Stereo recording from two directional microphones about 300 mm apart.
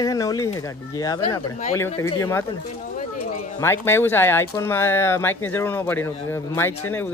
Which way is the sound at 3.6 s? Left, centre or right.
Centre.